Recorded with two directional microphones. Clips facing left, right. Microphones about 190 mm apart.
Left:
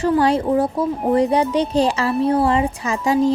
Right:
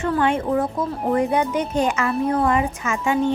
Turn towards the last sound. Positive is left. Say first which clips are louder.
# left 3 dB
turn(degrees=35)  # may be behind; listen again after turning